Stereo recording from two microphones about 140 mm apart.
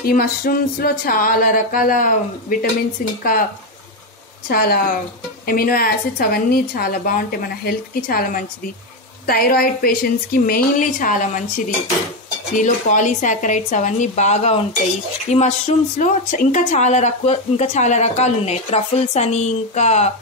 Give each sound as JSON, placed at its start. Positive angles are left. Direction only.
{"t": 0.0, "sound": "a woman's voice", "side_deg": 90}
{"t": 4.5, "sound": "a woman's voice", "side_deg": 90}